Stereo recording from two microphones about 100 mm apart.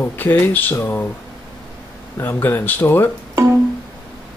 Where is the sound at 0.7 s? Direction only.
30° left (ahead or behind).